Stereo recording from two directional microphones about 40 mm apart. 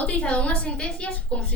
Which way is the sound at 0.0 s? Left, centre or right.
Left.